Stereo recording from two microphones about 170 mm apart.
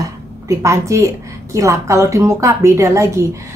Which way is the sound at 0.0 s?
20° right (ahead or behind).